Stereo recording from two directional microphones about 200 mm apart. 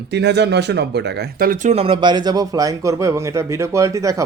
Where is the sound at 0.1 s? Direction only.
60° right (ahead or behind).